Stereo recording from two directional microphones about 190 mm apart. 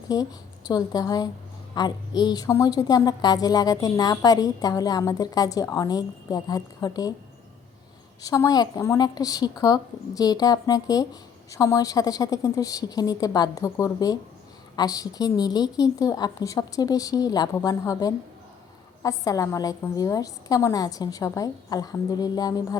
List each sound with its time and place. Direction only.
0.1 s a woman's voice: 20° left (ahead or behind)
8.2 s a woman's voice: 20° left (ahead or behind)